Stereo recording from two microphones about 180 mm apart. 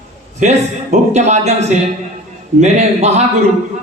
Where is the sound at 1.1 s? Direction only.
40° right (ahead or behind).